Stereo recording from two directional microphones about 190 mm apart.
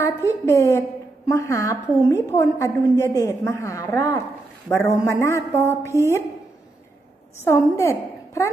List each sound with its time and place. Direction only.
0.0 s a woman's voice: 15° left (ahead or behind)
7.3 s a woman's voice: 15° left (ahead or behind)